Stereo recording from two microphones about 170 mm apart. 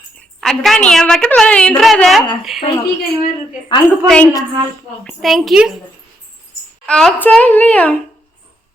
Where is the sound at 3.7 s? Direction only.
30° left (ahead or behind).